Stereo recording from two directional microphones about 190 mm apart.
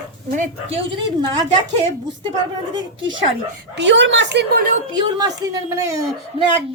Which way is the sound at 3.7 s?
70° right (ahead or behind).